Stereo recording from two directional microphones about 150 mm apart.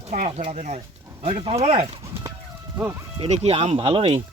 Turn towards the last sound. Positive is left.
turn(degrees=-40)  # may be behind; listen again after turning